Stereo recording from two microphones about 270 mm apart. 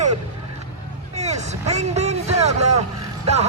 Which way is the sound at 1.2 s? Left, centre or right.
Right.